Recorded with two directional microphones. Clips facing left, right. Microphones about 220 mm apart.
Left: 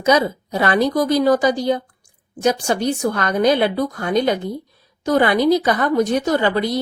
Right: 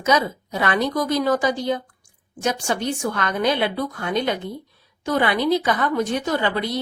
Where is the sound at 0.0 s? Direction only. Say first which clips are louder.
Left 4 dB; 35° left (ahead or behind).